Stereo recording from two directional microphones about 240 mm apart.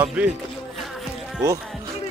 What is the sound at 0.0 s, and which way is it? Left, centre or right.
Speech, centre.